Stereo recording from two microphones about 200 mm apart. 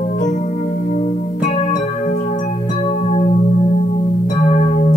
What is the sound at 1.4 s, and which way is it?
Music, 35° left (ahead or behind).